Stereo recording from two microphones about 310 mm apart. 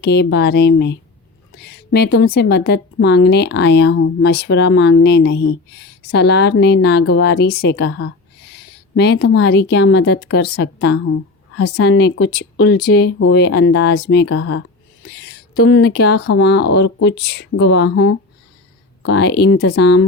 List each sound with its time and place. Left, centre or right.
0.0 s a woman's voice: left
8.6 s a sound: left
9.1 s a woman's voice: left
15.5 s a woman's voice: left